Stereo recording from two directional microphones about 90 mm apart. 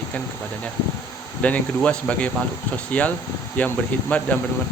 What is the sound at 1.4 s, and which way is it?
Speech, 15° left (ahead or behind).